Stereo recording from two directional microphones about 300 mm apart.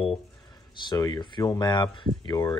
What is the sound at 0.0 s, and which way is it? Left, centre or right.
Speech, centre.